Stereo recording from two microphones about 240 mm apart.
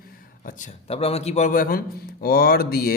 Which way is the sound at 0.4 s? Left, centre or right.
Left.